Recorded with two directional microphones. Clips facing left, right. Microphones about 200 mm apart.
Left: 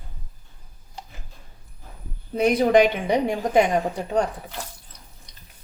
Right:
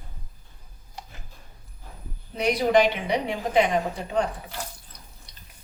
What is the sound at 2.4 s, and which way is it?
A woman's voice, 50° left (ahead or behind).